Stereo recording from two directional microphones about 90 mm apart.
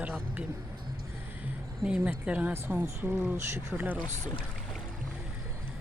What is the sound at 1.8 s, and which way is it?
Speech, 10° right (ahead or behind).